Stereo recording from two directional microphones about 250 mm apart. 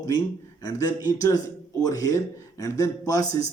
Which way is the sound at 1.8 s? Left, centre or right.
Centre.